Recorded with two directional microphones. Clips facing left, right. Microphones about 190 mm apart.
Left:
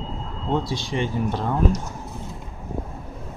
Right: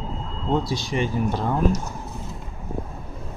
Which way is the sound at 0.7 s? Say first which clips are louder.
Right 1 dB; 40° right (ahead or behind).